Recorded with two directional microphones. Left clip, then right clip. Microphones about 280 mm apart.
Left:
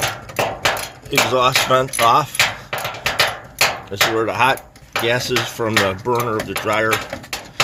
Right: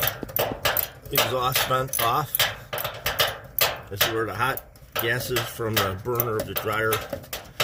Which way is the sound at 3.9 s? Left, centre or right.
Centre.